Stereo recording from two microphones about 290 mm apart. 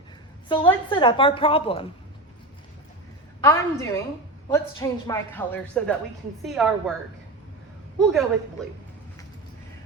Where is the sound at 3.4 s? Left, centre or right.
Centre.